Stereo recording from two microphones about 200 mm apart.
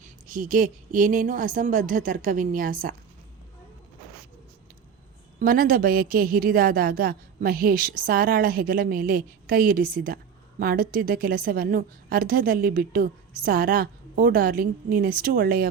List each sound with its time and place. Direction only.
0.0 s a woman's voice: 45° right (ahead or behind)
5.4 s a woman's voice: 45° right (ahead or behind)